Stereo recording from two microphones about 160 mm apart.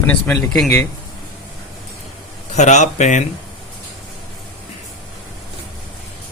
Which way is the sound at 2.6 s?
50° left (ahead or behind).